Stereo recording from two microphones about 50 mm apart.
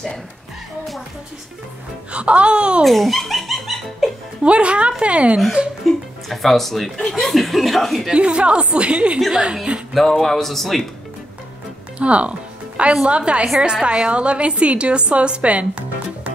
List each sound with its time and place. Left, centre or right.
2.1 s a woman's voice: right
2.8 s dog: centre
4.4 s a woman's voice: right
6.2 s speech: centre
8.1 s a woman's voice: right
9.9 s speech: centre
12.0 s a woman's voice: right